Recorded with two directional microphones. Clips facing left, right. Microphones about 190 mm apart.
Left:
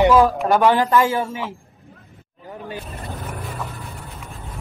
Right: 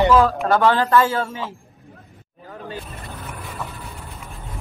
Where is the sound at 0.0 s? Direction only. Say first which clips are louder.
Left 1 dB; 15° left (ahead or behind).